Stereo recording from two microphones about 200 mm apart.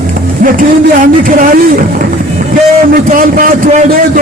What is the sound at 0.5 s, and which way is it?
Speech, 45° right (ahead or behind).